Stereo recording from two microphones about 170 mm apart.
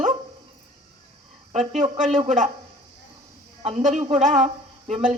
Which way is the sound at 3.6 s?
45° right (ahead or behind).